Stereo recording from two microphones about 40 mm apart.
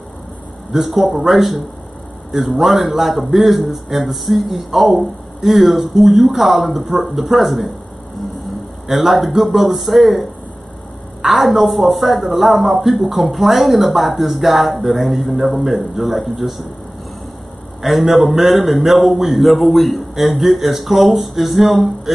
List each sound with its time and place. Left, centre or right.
0.7 s speech: centre
8.8 s speech: centre
11.2 s speech: centre
17.8 s speech: centre